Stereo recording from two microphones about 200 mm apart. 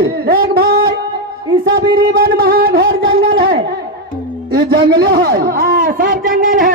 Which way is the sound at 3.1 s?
50° right (ahead or behind).